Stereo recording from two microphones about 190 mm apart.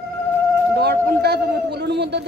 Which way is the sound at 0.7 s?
60° right (ahead or behind).